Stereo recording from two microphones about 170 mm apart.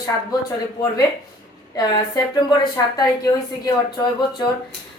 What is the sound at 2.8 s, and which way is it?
A woman's voice, 20° left (ahead or behind).